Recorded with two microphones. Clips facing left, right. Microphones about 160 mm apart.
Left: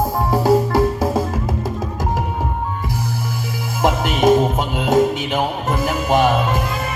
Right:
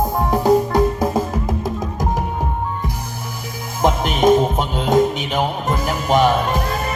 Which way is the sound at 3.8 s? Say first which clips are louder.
Even; 20° right (ahead or behind).